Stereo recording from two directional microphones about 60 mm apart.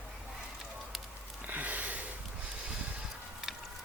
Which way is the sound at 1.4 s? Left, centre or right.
Right.